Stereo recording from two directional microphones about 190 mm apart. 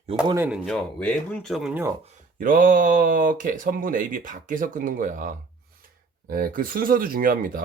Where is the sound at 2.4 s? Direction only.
45° right (ahead or behind).